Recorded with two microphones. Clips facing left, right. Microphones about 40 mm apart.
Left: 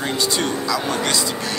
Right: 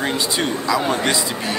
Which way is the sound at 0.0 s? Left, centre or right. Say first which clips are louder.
Right 1 dB; centre.